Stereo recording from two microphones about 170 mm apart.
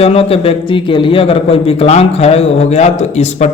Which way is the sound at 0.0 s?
35° left (ahead or behind).